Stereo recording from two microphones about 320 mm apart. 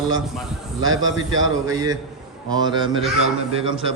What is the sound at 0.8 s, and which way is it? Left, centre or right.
Speech, right.